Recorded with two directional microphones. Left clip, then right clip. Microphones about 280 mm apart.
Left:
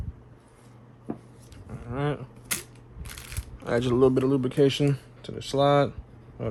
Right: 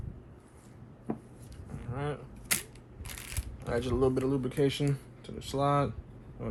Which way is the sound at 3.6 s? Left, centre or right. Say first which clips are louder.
Left 7 dB; left.